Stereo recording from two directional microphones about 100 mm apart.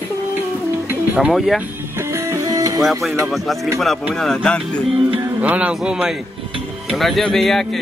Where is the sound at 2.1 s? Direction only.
35° right (ahead or behind).